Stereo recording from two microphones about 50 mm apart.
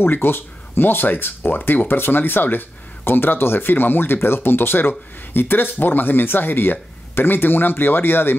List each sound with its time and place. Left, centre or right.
0.0 s speech: left